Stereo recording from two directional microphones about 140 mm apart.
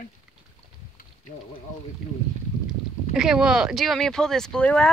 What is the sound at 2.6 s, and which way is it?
Speech, 5° right (ahead or behind).